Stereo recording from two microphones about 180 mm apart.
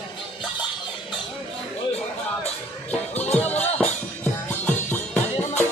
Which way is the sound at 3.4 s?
10° left (ahead or behind).